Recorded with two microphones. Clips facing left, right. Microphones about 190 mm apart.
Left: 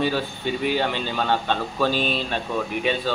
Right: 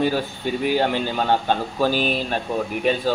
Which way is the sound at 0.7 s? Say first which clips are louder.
Right 3 dB; 45° right (ahead or behind).